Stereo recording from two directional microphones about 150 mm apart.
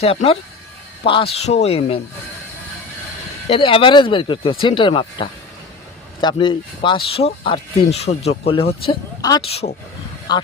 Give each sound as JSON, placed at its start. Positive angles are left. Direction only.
{"t": 0.0, "sound": "speech", "side_deg": 40}
{"t": 3.5, "sound": "speech", "side_deg": 35}